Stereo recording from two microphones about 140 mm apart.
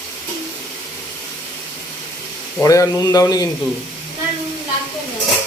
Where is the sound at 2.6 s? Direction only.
25° left (ahead or behind).